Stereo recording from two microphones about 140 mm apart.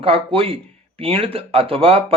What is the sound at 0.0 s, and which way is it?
Speech, 40° right (ahead or behind).